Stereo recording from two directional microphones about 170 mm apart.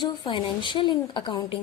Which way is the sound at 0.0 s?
30° left (ahead or behind).